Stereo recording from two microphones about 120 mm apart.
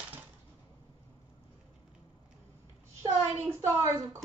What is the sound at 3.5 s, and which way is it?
Speech, 25° right (ahead or behind).